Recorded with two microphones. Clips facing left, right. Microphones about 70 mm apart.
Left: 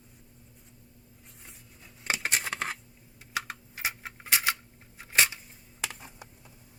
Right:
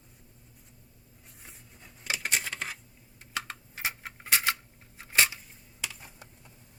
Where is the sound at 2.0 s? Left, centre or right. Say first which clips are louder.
Left 2 dB; left.